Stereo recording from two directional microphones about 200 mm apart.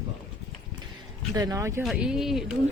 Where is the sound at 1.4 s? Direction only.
15° right (ahead or behind).